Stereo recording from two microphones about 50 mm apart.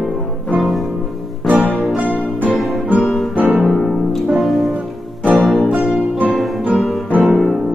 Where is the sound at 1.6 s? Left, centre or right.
Left.